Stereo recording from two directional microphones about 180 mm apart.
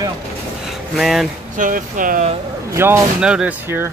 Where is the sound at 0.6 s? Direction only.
Centre (ahead or behind).